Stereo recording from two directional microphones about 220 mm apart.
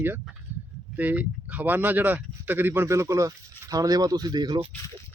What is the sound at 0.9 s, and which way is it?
Speech, 5° right (ahead or behind).